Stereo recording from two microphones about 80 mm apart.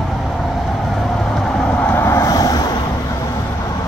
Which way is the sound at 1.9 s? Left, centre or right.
Left.